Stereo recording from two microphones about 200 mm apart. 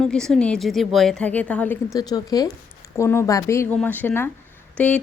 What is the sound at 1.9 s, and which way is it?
A woman's voice, 20° left (ahead or behind).